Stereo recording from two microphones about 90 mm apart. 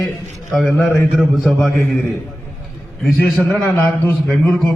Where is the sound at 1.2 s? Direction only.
5° left (ahead or behind).